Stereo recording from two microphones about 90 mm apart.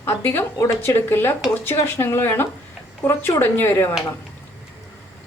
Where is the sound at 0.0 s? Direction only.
25° left (ahead or behind).